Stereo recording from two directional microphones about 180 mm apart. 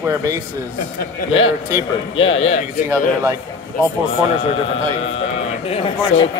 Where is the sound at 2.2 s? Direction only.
30° left (ahead or behind).